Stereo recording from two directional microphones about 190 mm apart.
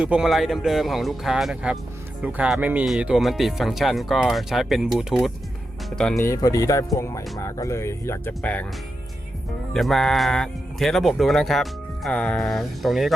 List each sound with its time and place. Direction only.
0.0 s speech: 5° right (ahead or behind)
6.1 s speech: 15° left (ahead or behind)
9.7 s speech: centre (ahead or behind)